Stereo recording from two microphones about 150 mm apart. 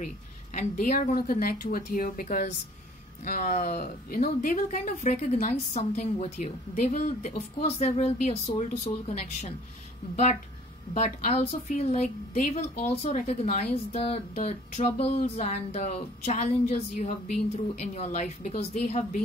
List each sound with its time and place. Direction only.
0.6 s a woman's voice: 55° left (ahead or behind)
1.2 s speech: 80° left; by 3.9 s 55° left (ahead or behind)
4.1 s a woman's voice: 75° left (ahead or behind); by 9.5 s 45° left (ahead or behind)
11.0 s a woman's voice: 50° left (ahead or behind)